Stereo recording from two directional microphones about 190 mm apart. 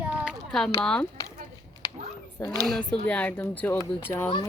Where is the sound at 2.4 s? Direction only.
20° left (ahead or behind).